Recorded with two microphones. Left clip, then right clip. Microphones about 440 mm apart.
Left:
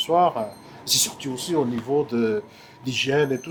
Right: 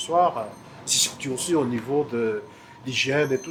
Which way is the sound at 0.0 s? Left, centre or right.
Left.